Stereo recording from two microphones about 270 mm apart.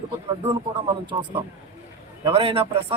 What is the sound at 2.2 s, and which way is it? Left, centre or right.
Speech, centre.